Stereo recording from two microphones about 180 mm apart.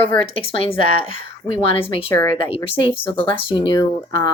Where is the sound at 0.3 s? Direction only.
30° left (ahead or behind).